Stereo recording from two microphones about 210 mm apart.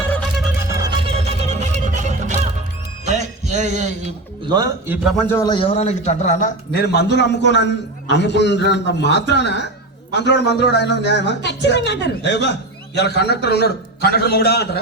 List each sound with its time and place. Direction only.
0.7 s a sound: 15° right (ahead or behind)
1.1 s music: 30° right (ahead or behind)
3.1 s a sound: 35° right (ahead or behind)
4.4 s a man's voice: 20° right (ahead or behind)
4.9 s a man's voice: centre (ahead or behind)
5.3 s a man's voice: 20° left (ahead or behind); by 14.7 s 50° left (ahead or behind)